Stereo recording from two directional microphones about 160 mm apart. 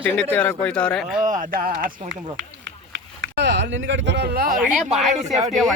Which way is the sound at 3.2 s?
90° right.